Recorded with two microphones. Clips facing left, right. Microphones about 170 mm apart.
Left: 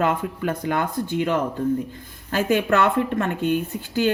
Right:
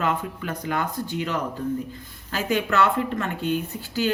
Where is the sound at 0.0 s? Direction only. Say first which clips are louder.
Left 4 dB; 50° left (ahead or behind).